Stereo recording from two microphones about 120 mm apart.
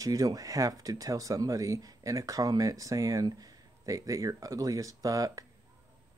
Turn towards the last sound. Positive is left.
turn(degrees=-30)  # may be behind; listen again after turning